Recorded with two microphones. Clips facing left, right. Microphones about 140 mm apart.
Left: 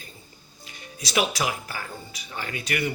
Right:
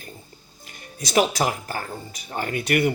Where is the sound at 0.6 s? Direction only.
50° right (ahead or behind).